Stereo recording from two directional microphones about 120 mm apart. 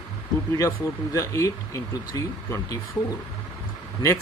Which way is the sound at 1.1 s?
25° left (ahead or behind).